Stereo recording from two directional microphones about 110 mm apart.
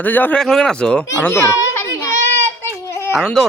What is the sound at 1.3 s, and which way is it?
Children playing, 25° left (ahead or behind).